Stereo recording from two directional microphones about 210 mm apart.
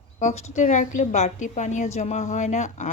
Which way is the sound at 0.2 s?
35° left (ahead or behind).